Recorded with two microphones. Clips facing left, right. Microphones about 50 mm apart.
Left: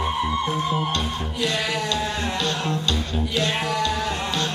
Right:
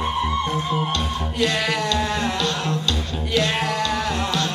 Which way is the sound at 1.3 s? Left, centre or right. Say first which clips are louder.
Right 3 dB; right.